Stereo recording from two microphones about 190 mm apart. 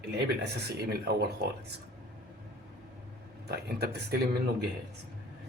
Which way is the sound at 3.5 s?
60° right (ahead or behind).